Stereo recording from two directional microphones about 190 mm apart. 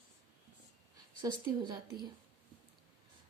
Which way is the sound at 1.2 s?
20° right (ahead or behind).